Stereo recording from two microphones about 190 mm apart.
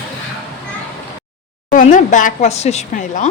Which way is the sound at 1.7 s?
45° left (ahead or behind).